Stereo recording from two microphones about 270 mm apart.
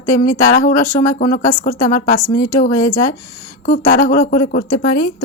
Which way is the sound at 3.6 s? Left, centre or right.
Left.